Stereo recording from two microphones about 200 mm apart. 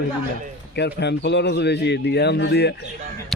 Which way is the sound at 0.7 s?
55° left (ahead or behind).